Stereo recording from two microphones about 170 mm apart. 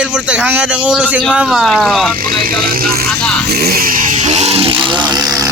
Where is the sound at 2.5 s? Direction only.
60° right (ahead or behind).